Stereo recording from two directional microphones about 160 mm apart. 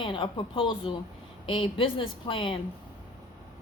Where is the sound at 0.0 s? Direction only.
30° left (ahead or behind).